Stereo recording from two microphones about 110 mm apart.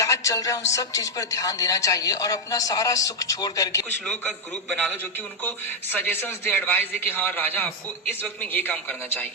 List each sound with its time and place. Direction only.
0.0 s a man's voice: 30° left (ahead or behind)
4.0 s a man's voice: 5° left (ahead or behind)
5.4 s a man's voice: 15° left (ahead or behind)